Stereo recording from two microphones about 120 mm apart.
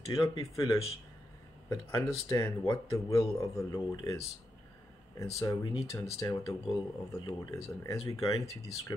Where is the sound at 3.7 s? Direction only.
35° left (ahead or behind).